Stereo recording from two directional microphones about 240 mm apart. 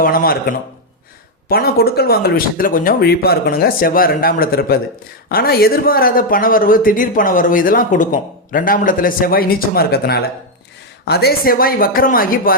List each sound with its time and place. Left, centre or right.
0.0 s speech: left